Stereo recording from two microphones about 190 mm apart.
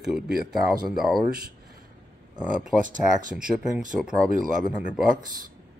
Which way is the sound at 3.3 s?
5° right (ahead or behind).